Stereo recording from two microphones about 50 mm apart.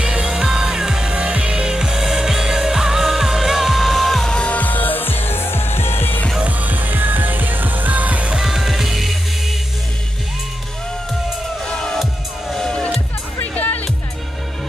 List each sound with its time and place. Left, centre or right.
0.0 s music: centre
4.5 s music: left
6.4 s music: right
8.4 s music: centre
11.6 s music: centre
13.4 s music: left